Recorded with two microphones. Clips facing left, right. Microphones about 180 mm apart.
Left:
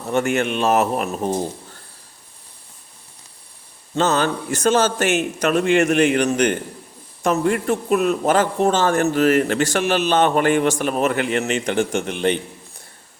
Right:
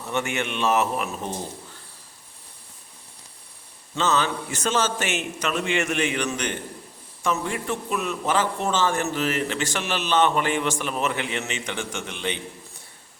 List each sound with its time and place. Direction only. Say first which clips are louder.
0.1 s a man's voice: left 7 dB; 50° left (ahead or behind)
3.9 s a man's voice: left 5 dB; 45° left (ahead or behind)
4.9 s a man's voice: left 8 dB; 55° left (ahead or behind)
5.7 s a man's voice: left 10 dB; 40° left (ahead or behind)
7.9 s a man's voice: left 12 dB; 60° left (ahead or behind)
8.1 s a man's voice: left 6 dB; 45° left (ahead or behind)